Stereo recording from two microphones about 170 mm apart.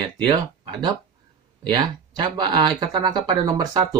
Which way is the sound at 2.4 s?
25° right (ahead or behind).